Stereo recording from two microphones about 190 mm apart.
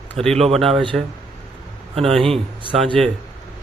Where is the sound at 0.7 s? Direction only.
25° right (ahead or behind).